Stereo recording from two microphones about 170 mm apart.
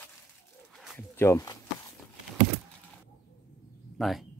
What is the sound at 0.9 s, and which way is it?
Speech, 15° left (ahead or behind).